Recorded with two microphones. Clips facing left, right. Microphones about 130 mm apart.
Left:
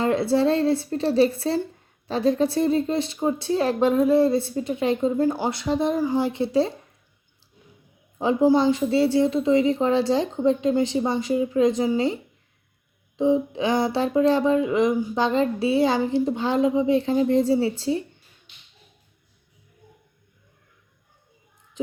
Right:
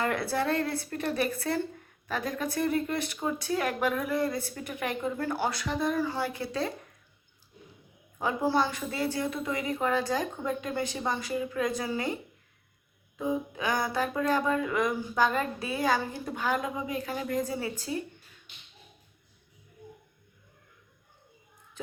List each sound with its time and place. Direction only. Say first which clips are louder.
0.0 s speech: left 9 dB; 25° left (ahead or behind)
8.2 s speech: left 9 dB; 20° left (ahead or behind)